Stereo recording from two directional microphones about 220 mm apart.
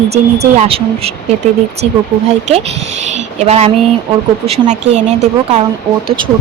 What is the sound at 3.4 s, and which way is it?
Speech, 30° right (ahead or behind).